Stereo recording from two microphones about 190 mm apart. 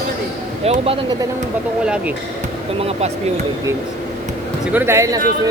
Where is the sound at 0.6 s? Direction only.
30° right (ahead or behind).